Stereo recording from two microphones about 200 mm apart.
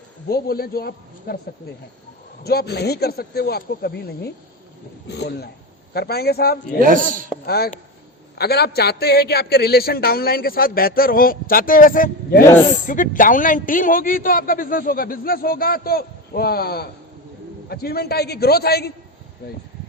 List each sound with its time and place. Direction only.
0.3 s a man's voice: 50° left (ahead or behind)
2.4 s a man's voice: 50° left (ahead or behind)
6.8 s speech: 40° right (ahead or behind)
7.4 s a man's voice: 50° left (ahead or behind)